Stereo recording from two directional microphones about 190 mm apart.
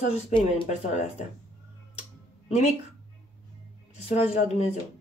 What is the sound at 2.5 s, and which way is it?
Speech, 35° left (ahead or behind).